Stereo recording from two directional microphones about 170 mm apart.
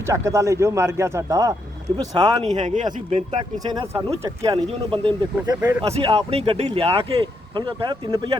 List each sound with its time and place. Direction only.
0.0 s speech: 15° right (ahead or behind)
2.4 s speech: 45° right (ahead or behind)
3.6 s speech: 20° right (ahead or behind)